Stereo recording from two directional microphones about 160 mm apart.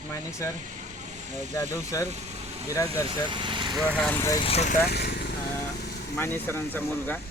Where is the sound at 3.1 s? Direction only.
30° right (ahead or behind).